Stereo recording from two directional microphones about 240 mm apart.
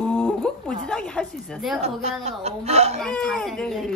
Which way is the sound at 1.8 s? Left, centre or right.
Right.